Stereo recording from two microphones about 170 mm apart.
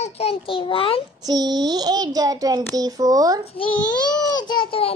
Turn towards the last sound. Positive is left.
turn(degrees=30)  # may be behind; listen again after turning